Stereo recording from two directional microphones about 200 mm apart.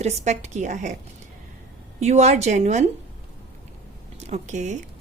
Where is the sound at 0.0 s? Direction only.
35° right (ahead or behind).